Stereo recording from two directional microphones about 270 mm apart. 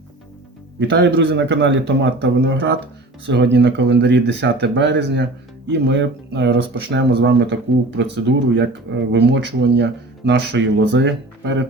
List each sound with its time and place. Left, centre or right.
0.8 s speech: right